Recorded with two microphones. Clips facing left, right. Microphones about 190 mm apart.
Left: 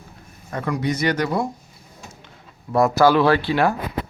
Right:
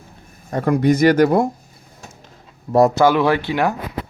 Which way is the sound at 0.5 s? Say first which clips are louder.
Right 8 dB; 40° right (ahead or behind).